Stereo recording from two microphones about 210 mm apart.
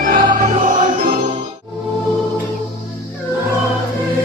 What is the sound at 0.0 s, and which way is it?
Music, 40° right (ahead or behind).